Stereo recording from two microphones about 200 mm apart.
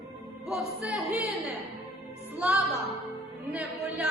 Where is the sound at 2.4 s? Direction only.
5° right (ahead or behind).